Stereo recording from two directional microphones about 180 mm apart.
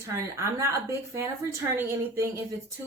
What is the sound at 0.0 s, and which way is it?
Speech, 15° right (ahead or behind).